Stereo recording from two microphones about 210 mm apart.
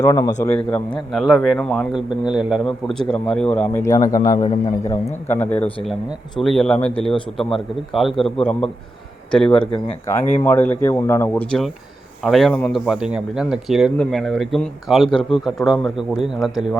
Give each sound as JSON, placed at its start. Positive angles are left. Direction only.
{"t": 0.0, "sound": "a man's voice", "side_deg": 15}